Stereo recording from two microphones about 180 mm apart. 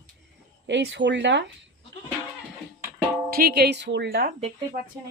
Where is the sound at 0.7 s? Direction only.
75° right (ahead or behind).